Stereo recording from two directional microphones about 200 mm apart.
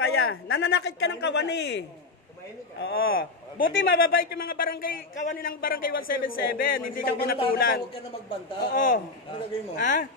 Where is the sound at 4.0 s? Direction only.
50° left (ahead or behind).